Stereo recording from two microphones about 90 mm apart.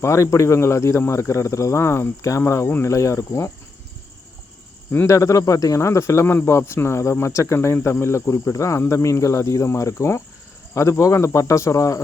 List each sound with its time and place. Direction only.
0.0 s speech: 35° left (ahead or behind)
5.0 s speech: 35° left (ahead or behind)